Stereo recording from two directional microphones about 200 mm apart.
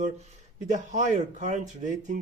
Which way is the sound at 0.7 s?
40° right (ahead or behind).